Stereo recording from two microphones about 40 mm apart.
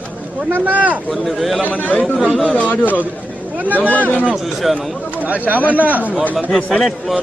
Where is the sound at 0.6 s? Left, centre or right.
Right.